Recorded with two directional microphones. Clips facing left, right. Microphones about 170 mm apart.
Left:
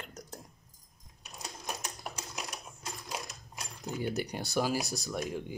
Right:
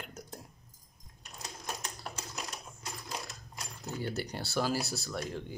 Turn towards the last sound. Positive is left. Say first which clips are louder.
# left 2 dB
turn(degrees=15)  # may be behind; listen again after turning